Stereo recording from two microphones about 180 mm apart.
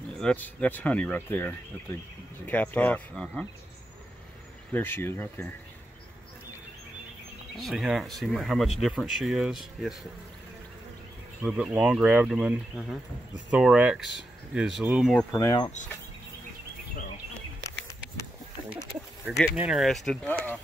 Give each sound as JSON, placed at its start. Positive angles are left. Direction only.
{"t": 0.2, "sound": "speech", "side_deg": 5}
{"t": 4.7, "sound": "speech", "side_deg": 10}
{"t": 7.5, "sound": "speech", "side_deg": 0}
{"t": 11.4, "sound": "speech", "side_deg": -5}
{"t": 15.3, "sound": "speech", "side_deg": 20}
{"t": 19.2, "sound": "speech", "side_deg": -5}